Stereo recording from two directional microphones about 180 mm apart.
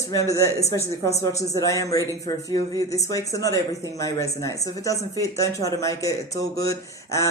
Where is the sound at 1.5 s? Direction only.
20° left (ahead or behind).